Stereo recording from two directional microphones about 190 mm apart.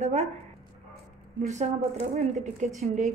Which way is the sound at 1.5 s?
35° right (ahead or behind).